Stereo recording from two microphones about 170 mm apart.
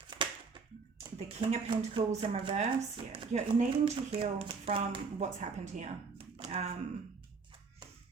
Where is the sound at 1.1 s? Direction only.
35° right (ahead or behind).